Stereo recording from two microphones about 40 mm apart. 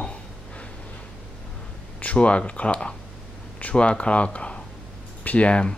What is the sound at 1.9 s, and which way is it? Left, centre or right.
Speech, left.